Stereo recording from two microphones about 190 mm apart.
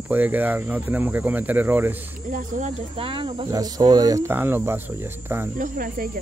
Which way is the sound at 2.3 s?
40° right (ahead or behind).